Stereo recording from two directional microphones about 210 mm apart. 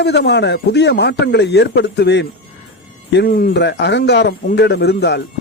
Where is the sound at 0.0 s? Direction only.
50° left (ahead or behind).